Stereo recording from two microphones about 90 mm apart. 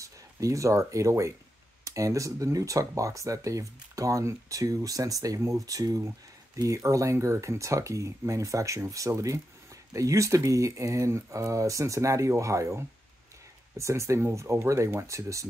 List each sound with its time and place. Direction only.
0.0 s speech: 35° right (ahead or behind)